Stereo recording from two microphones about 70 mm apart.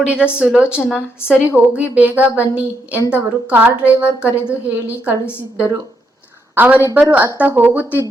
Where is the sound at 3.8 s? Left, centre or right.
Centre.